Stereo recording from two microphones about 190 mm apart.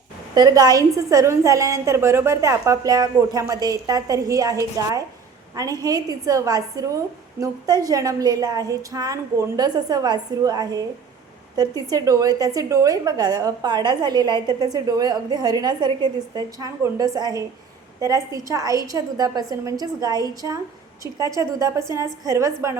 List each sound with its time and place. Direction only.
0.3 s a woman's voice: 20° right (ahead or behind)